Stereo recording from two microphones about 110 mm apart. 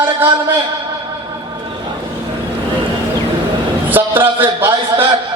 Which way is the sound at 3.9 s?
15° right (ahead or behind).